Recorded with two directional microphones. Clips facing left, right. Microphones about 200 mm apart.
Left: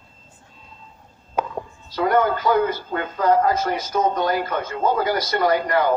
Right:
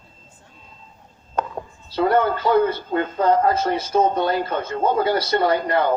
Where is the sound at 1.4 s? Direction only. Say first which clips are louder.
Even; 10° left (ahead or behind).